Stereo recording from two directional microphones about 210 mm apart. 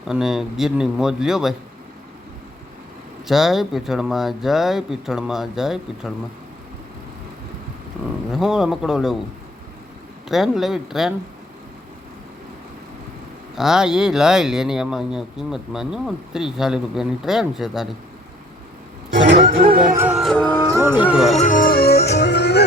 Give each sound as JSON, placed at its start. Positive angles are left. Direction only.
{"t": 0.1, "sound": "speech", "side_deg": 0}
{"t": 3.2, "sound": "speech", "side_deg": 0}
{"t": 8.3, "sound": "speech", "side_deg": 0}
{"t": 10.2, "sound": "speech", "side_deg": 0}
{"t": 13.6, "sound": "speech", "side_deg": 0}
{"t": 19.3, "sound": "speech", "side_deg": -45}
{"t": 19.8, "sound": "music", "side_deg": -5}
{"t": 21.3, "sound": "music", "side_deg": 40}